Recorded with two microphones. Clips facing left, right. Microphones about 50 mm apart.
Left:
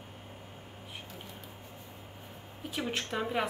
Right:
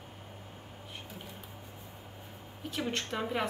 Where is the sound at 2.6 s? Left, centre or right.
Centre.